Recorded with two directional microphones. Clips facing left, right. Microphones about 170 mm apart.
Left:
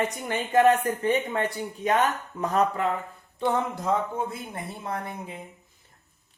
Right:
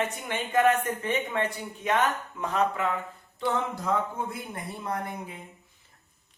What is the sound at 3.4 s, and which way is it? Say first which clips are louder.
Speech: left 3 dB; 25° left (ahead or behind).